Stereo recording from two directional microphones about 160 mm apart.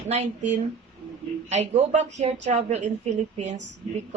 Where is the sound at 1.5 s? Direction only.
45° right (ahead or behind).